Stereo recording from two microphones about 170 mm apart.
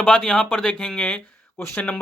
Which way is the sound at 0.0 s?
5° left (ahead or behind).